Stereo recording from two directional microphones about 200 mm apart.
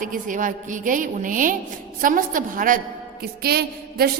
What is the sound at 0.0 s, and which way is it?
A woman's voice, 40° right (ahead or behind).